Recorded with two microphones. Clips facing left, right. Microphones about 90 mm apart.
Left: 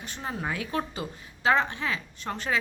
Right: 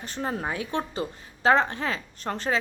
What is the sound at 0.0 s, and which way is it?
Speech, 40° right (ahead or behind).